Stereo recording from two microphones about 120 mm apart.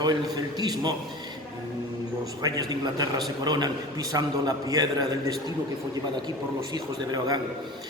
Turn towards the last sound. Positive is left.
turn(degrees=-35)  # may be behind; listen again after turning